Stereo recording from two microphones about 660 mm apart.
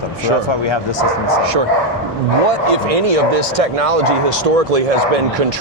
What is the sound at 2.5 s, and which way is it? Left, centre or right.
Speech, right.